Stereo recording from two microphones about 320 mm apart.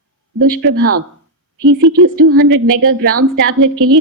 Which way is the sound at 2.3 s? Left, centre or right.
Right.